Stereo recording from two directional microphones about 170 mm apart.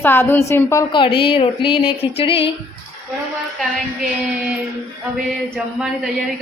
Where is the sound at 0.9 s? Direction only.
30° left (ahead or behind).